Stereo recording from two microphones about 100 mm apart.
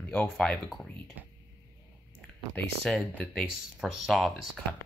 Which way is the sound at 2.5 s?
5° left (ahead or behind).